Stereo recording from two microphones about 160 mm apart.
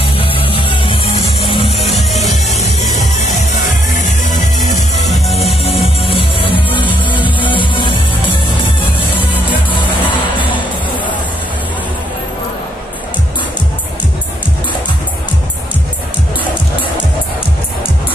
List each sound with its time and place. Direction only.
0.2 s music: 35° left (ahead or behind)
1.8 s music: centre (ahead or behind)
3.2 s music: 45° left (ahead or behind); by 8.4 s 30° left (ahead or behind)